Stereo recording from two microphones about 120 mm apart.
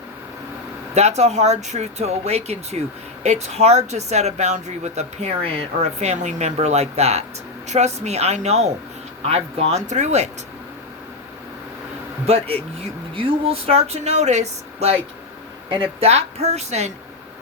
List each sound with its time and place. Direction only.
0.9 s speech: 70° right (ahead or behind)
12.2 s speech: 60° right (ahead or behind)
16.0 s speech: 60° right (ahead or behind)